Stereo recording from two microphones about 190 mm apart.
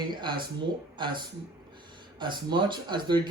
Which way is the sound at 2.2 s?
25° right (ahead or behind).